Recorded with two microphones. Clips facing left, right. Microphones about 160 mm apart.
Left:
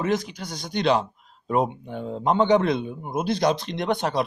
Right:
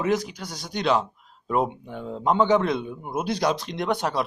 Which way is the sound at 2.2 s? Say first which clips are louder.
Left 1 dB; 5° right (ahead or behind).